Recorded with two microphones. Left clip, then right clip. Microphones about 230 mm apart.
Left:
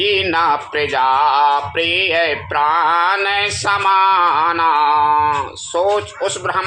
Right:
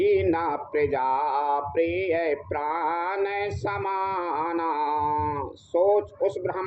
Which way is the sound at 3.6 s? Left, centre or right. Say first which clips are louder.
Left 16 dB; left.